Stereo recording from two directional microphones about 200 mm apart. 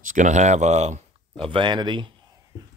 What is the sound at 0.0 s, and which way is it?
Speech, 40° right (ahead or behind).